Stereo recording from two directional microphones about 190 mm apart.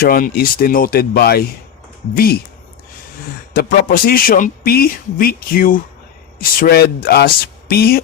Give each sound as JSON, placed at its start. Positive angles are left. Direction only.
{"t": 0.0, "sound": "a man's voice", "side_deg": 50}
{"t": 3.5, "sound": "a man's voice", "side_deg": 50}